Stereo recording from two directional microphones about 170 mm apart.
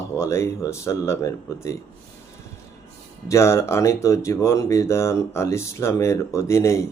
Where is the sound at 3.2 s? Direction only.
15° left (ahead or behind).